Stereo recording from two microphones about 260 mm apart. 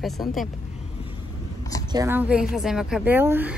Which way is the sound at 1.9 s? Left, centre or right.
Centre.